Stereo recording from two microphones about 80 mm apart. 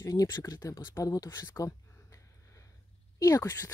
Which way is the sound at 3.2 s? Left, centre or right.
Left.